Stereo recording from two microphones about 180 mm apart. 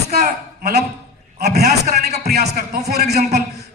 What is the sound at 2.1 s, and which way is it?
Speech, 40° right (ahead or behind).